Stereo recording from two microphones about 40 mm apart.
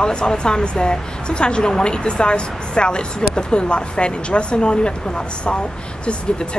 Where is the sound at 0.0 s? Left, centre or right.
Left.